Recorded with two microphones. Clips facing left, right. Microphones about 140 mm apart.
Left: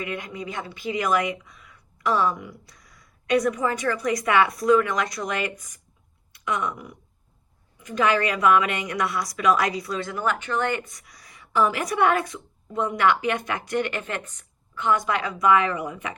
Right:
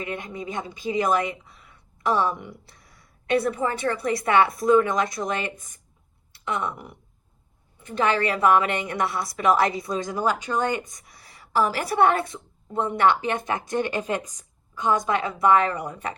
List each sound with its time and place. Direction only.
0.0 s a woman's voice: 25° right (ahead or behind)
6.3 s a sound: 30° right (ahead or behind)
7.8 s a woman's voice: 30° right (ahead or behind)